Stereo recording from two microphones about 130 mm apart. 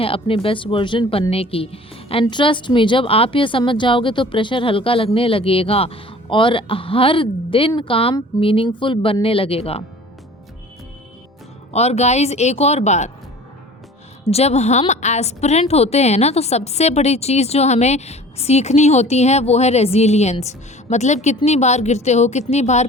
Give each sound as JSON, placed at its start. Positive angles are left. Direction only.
{"t": 0.0, "sound": "speech", "side_deg": 45}
{"t": 11.7, "sound": "a woman's voice", "side_deg": 55}
{"t": 14.3, "sound": "a woman's voice", "side_deg": 55}